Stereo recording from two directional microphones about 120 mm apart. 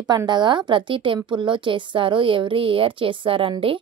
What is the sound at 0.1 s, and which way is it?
A woman's voice, 35° right (ahead or behind).